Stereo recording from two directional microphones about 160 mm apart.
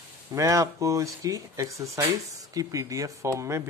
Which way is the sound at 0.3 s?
20° right (ahead or behind).